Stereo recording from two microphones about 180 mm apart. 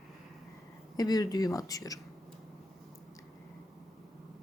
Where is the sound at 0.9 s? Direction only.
20° left (ahead or behind).